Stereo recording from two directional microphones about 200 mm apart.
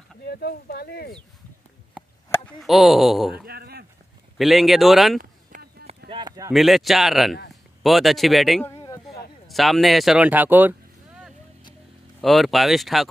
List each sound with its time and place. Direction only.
0.2 s speech: 50° left (ahead or behind)
2.6 s speech: centre (ahead or behind)
3.4 s a sound: 50° right (ahead or behind)
4.4 s speech: centre (ahead or behind)
5.5 s run: 50° right (ahead or behind)
6.0 s a sound: 20° right (ahead or behind)
6.5 s speech: centre (ahead or behind)
8.6 s a sound: 15° left (ahead or behind)
9.5 s speech: centre (ahead or behind)